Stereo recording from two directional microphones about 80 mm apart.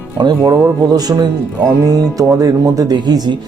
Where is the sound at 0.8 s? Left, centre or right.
Right.